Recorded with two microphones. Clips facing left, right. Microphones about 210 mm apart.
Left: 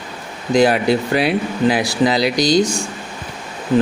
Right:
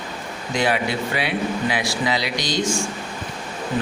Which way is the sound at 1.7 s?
40° left (ahead or behind).